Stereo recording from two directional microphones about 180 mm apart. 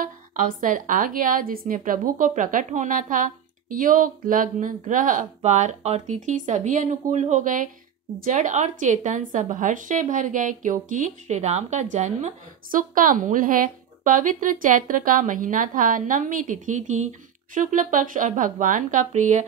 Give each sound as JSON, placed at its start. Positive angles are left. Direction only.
{"t": 0.0, "sound": "a woman's voice", "side_deg": -50}